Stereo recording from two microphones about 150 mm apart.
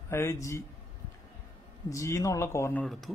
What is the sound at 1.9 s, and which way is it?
Speech, 20° left (ahead or behind).